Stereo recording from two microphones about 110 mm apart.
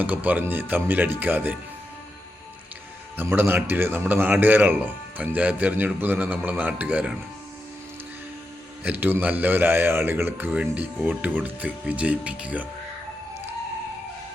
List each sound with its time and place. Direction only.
0.0 s a man's voice: 15° right (ahead or behind)
3.2 s a man's voice: 20° right (ahead or behind)
8.8 s a man's voice: 15° right (ahead or behind)